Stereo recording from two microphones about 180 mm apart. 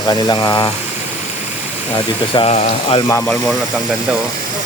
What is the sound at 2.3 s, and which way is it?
Speech, 35° left (ahead or behind).